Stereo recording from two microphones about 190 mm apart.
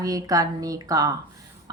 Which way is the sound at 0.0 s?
20° right (ahead or behind).